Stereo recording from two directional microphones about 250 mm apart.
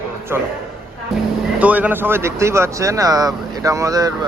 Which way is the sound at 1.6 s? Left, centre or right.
Centre.